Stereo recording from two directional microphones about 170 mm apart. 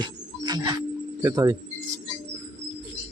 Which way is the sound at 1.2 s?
15° right (ahead or behind).